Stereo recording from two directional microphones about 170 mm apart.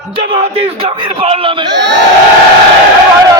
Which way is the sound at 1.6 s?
90° right.